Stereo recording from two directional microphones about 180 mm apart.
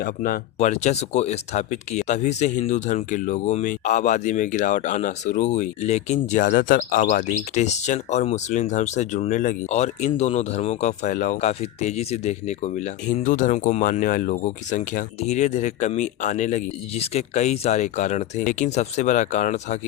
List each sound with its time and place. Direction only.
0.0 s speech: 55° left (ahead or behind)
0.6 s speech: 40° left (ahead or behind)